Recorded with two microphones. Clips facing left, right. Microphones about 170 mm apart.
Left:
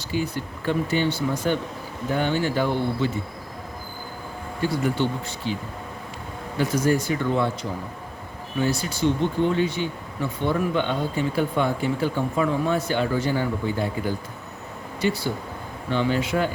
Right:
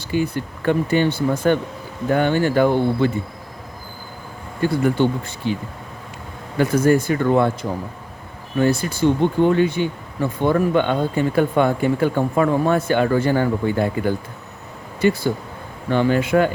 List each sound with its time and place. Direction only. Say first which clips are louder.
0.1 s speech: right 5 dB; 55° right (ahead or behind)
4.6 s speech: right 6 dB; 50° right (ahead or behind)
6.6 s speech: right 6 dB; 55° right (ahead or behind)
15.9 s speech: right 6 dB; 50° right (ahead or behind)